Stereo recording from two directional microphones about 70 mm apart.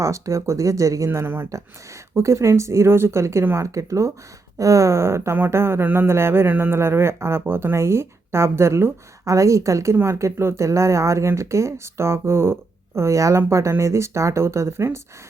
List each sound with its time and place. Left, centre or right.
0.0 s speech: right
1.2 s speech: right
2.1 s speech: right
13.0 s speech: right